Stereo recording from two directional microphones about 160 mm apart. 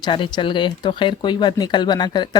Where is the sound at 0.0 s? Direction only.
30° left (ahead or behind).